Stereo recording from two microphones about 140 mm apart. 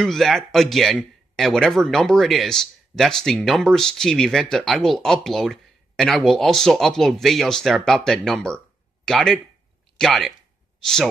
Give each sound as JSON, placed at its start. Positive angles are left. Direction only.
{"t": 0.0, "sound": "speech", "side_deg": 0}